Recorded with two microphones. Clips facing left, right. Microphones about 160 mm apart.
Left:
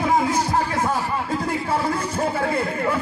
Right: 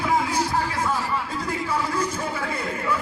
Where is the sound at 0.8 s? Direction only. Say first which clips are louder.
Left 2 dB; 50° left (ahead or behind).